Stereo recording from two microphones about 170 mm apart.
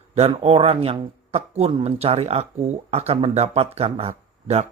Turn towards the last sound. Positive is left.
turn(degrees=-40)  # may be behind; listen again after turning